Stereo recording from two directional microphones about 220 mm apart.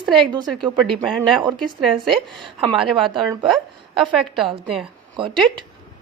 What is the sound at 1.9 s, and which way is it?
Speech, centre (ahead or behind).